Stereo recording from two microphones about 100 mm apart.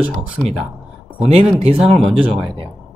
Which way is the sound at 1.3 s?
85° right.